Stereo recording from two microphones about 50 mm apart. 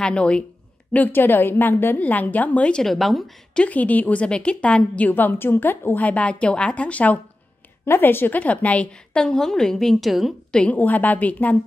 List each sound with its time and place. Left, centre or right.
0.0 s a woman's voice: left
1.1 s a woman's voice: left
2.0 s a woman's voice: left
2.7 s speech: centre
3.5 s a woman's voice: left
5.1 s a woman's voice: left
7.8 s a woman's voice: left
8.4 s a woman's voice: left
9.1 s a woman's voice: centre
10.7 s a woman's voice: left